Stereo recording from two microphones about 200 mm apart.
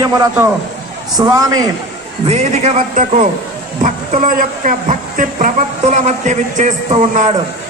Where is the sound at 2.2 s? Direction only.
35° right (ahead or behind).